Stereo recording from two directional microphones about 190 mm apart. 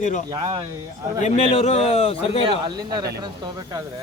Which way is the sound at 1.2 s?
35° left (ahead or behind).